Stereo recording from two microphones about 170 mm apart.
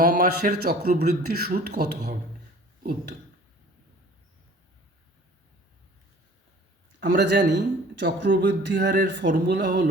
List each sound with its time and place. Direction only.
0.0 s a man's voice: 50° right (ahead or behind); by 2.0 s 75° right (ahead or behind)
7.0 s a man's voice: 85° right